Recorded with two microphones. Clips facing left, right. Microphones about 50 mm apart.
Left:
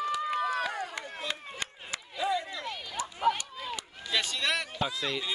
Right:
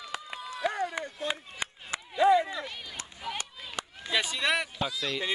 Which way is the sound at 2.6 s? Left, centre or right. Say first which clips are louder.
Left 3 dB; centre.